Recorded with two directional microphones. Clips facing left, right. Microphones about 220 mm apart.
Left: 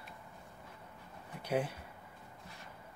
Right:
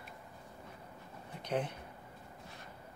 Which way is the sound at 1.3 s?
10° left (ahead or behind).